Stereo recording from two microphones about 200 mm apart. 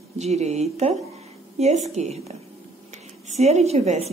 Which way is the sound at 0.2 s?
35° right (ahead or behind).